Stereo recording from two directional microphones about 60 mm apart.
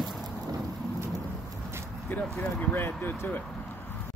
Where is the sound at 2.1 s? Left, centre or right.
Left.